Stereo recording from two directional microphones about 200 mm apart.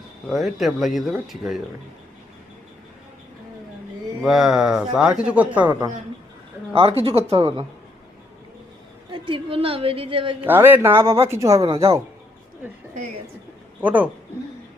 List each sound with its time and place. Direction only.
0.3 s speech: centre (ahead or behind)
4.2 s speech: 5° right (ahead or behind)
6.7 s a woman's voice: 30° right (ahead or behind)
9.1 s a woman's voice: 25° right (ahead or behind)
10.4 s speech: 10° right (ahead or behind)
13.8 s speech: 10° right (ahead or behind)